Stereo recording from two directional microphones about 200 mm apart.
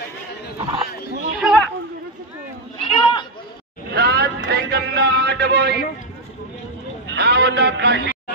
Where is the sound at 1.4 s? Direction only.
Centre (ahead or behind).